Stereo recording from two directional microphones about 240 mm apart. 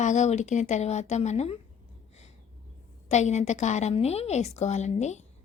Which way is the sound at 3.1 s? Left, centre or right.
Left.